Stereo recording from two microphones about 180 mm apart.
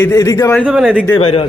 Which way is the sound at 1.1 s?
35° left (ahead or behind).